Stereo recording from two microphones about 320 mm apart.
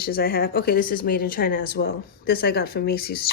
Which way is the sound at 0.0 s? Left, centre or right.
Left.